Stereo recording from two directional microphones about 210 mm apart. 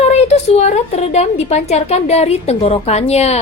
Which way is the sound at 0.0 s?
30° left (ahead or behind).